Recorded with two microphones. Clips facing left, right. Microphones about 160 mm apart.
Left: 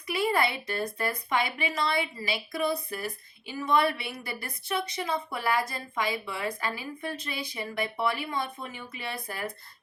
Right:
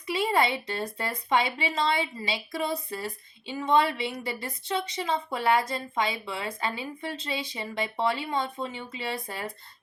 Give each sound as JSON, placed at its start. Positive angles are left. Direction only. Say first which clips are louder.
{"t": 0.1, "sound": "a woman's voice", "louder": "right 1 dB", "side_deg": -25}